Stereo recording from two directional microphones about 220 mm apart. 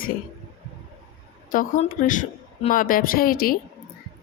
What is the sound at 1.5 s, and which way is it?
A woman's voice, 35° left (ahead or behind).